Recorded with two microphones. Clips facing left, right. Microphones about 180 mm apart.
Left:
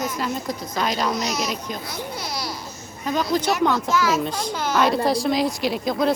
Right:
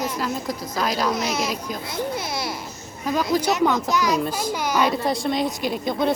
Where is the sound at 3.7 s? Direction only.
15° right (ahead or behind).